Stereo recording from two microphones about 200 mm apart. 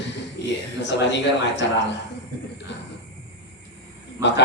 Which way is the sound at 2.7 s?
60° left (ahead or behind).